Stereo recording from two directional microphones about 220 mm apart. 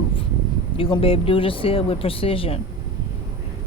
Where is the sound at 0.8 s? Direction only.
25° left (ahead or behind).